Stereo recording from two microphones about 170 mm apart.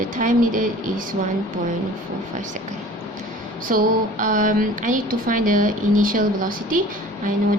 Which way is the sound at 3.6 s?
50° right (ahead or behind).